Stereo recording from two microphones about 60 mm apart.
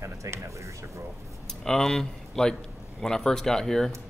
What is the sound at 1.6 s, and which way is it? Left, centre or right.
A man's voice, centre.